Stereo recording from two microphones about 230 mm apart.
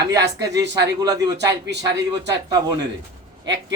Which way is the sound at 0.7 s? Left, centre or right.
Centre.